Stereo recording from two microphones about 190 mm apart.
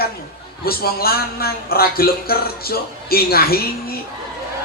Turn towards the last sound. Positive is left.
turn(degrees=50)  # may be behind; listen again after turning